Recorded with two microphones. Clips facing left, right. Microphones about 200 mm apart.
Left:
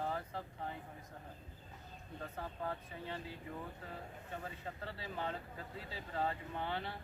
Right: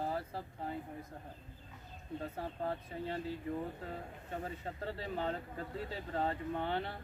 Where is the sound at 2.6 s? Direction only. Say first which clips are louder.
Right 5 dB; 40° right (ahead or behind).